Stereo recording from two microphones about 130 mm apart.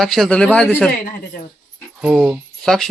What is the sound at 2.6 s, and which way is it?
Speech, 5° left (ahead or behind).